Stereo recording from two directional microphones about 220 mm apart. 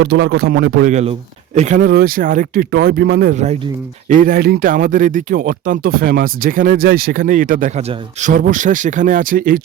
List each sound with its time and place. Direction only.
0.0 s a man's voice: 50° right (ahead or behind)
0.9 s speech: 30° right (ahead or behind)